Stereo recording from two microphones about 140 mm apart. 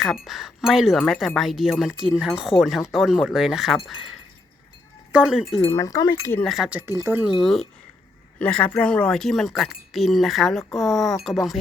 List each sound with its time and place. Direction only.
0.0 s speech: centre (ahead or behind)
5.6 s speech: 20° left (ahead or behind)
6.4 s speech: centre (ahead or behind)